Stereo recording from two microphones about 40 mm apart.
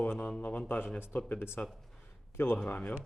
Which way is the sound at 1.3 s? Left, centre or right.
Left.